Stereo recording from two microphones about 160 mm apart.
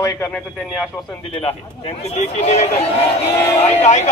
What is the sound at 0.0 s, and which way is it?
Speech, 20° left (ahead or behind).